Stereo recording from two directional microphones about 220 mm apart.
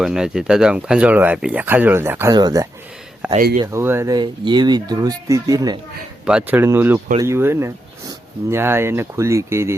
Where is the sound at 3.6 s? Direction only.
15° right (ahead or behind).